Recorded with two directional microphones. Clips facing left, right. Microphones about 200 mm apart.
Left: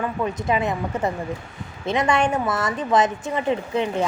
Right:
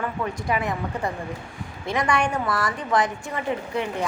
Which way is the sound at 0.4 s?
25° left (ahead or behind).